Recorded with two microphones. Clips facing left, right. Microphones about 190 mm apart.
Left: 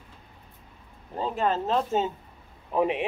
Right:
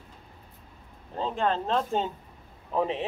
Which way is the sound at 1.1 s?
10° left (ahead or behind).